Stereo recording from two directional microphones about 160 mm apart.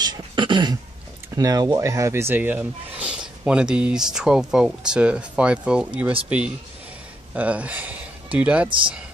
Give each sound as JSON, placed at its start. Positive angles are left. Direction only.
{"t": 0.0, "sound": "a sound", "side_deg": -30}
{"t": 1.3, "sound": "speech", "side_deg": -20}
{"t": 8.6, "sound": "speech", "side_deg": -30}